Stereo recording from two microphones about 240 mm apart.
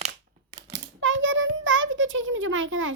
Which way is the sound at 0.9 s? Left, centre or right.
Right.